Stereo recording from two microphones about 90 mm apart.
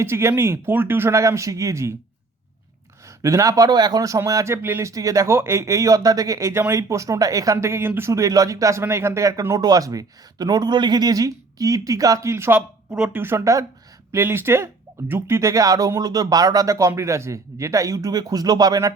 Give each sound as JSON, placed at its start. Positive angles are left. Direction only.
{"t": 0.0, "sound": "speech", "side_deg": -30}
{"t": 3.2, "sound": "speech", "side_deg": -35}
{"t": 12.5, "sound": "speech", "side_deg": -10}
{"t": 13.1, "sound": "speech", "side_deg": -30}
{"t": 14.1, "sound": "speech", "side_deg": -25}